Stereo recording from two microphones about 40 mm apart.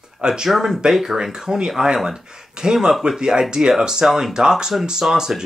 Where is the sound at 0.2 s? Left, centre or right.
Centre.